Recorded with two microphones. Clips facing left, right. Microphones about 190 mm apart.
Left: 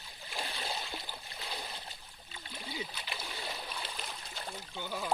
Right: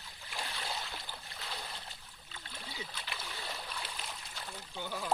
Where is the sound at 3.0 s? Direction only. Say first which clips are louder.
Left 2 dB; 20° left (ahead or behind).